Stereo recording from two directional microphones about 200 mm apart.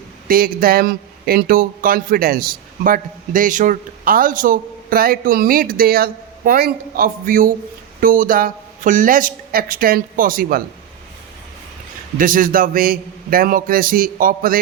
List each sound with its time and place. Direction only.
0.3 s speech: 45° right (ahead or behind)
12.1 s speech: 45° right (ahead or behind)